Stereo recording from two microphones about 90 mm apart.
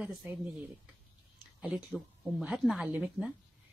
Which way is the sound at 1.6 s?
10° right (ahead or behind).